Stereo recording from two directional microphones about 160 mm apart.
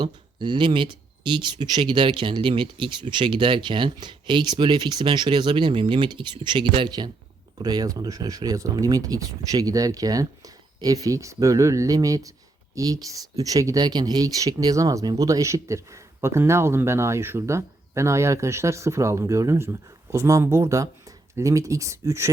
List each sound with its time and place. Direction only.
0.0 s speech: 30° right (ahead or behind)